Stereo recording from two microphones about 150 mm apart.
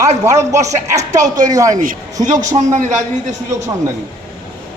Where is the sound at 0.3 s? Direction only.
20° right (ahead or behind).